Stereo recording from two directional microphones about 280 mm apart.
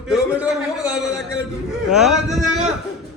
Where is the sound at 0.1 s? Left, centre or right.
Centre.